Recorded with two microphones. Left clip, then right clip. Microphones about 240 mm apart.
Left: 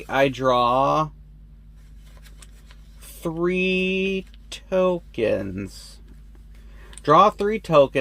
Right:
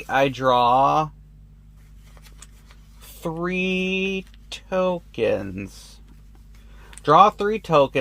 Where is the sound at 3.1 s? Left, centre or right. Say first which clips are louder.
Left 3 dB; centre.